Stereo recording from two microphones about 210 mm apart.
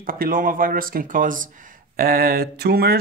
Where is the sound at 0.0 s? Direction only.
40° right (ahead or behind).